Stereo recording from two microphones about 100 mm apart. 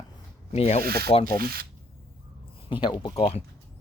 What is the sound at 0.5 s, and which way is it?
Speech, 90° left.